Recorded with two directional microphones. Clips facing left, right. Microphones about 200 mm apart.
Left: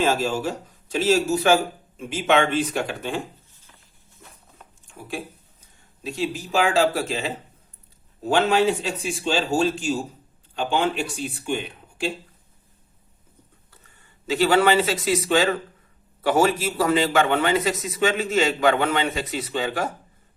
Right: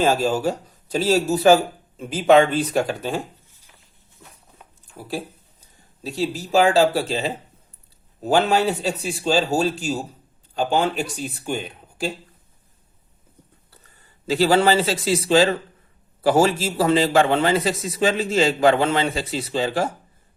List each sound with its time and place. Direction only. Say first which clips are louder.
0.0 s a man's voice: right 3 dB; 35° right (ahead or behind)
4.9 s a man's voice: right 3 dB; 35° right (ahead or behind)
8.3 s a man's voice: right 1 dB; 35° right (ahead or behind)
13.7 s a man's voice: right 1 dB; 35° right (ahead or behind)